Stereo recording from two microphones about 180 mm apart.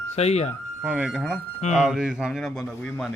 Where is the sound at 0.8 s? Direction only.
5° right (ahead or behind).